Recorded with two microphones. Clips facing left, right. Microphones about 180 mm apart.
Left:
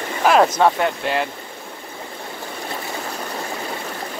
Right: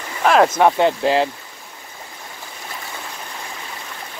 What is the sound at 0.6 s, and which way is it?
Speech, 25° right (ahead or behind).